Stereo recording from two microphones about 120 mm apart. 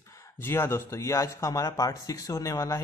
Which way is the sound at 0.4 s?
20° left (ahead or behind).